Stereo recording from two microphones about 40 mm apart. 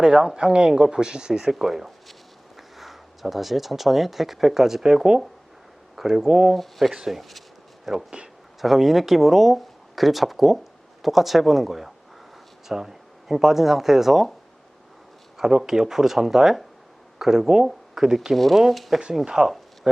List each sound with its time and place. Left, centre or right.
0.0 s speech: centre
6.2 s speech: centre
6.5 s speech: centre
6.9 s speech: centre
7.2 s speech: centre
15.4 s speech: centre
18.3 s speech: centre
18.9 s speech: centre